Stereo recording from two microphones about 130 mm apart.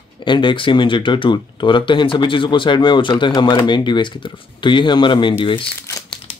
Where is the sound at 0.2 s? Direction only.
40° left (ahead or behind).